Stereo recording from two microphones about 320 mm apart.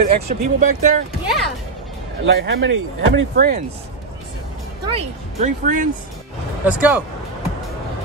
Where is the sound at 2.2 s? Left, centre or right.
Right.